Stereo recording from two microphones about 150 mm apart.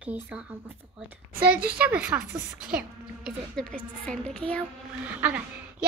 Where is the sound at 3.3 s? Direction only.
5° left (ahead or behind).